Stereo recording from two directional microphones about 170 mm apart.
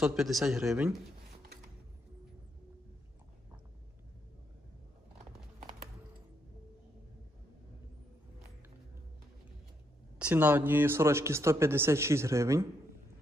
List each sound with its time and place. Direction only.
0.0 s speech: 5° right (ahead or behind)
10.1 s speech: 10° right (ahead or behind)